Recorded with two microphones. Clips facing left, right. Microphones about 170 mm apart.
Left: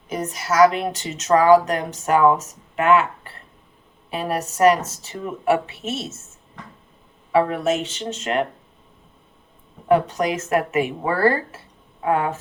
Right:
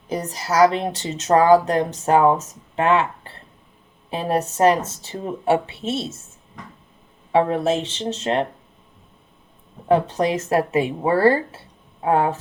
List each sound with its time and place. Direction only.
0.1 s speech: 35° right (ahead or behind)
7.3 s speech: 30° right (ahead or behind)
9.9 s speech: 30° right (ahead or behind)